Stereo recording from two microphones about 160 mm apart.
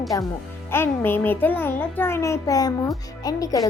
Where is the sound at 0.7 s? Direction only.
15° left (ahead or behind).